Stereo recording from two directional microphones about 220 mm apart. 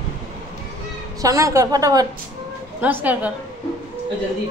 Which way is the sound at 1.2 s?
15° right (ahead or behind).